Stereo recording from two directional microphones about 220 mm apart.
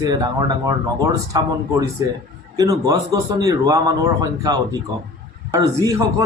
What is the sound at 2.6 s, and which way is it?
A man's voice, 15° right (ahead or behind).